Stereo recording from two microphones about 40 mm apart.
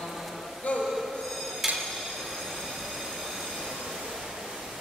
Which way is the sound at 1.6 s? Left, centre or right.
Centre.